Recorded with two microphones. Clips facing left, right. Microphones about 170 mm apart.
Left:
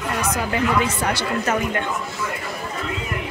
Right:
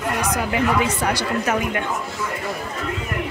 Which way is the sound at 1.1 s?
10° right (ahead or behind).